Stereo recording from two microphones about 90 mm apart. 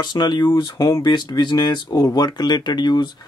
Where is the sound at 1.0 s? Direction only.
50° left (ahead or behind).